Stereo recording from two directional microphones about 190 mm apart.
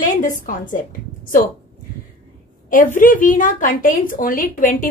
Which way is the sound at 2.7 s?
45° left (ahead or behind).